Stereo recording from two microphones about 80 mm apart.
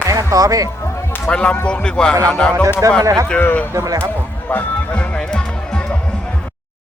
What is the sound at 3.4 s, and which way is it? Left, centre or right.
Speech, left.